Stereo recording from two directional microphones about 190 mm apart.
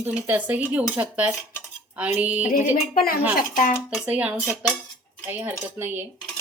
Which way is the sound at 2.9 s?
50° left (ahead or behind).